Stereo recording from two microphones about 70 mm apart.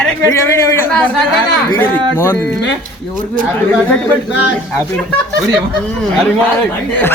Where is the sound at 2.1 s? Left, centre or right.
Left.